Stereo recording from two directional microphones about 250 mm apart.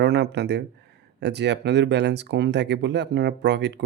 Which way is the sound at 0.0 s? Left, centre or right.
Right.